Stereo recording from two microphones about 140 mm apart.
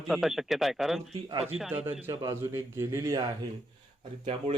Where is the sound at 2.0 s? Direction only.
20° right (ahead or behind).